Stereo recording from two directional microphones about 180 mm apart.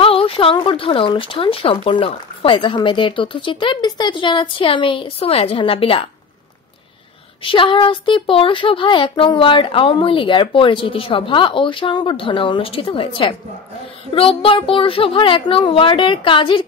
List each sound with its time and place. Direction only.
0.0 s speech: 30° left (ahead or behind)
7.4 s speech: 30° left (ahead or behind)